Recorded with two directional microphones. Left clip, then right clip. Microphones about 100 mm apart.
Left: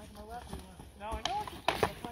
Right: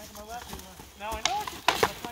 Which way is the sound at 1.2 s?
25° left (ahead or behind).